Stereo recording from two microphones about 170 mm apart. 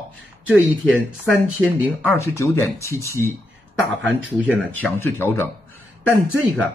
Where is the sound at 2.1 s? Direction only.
15° left (ahead or behind).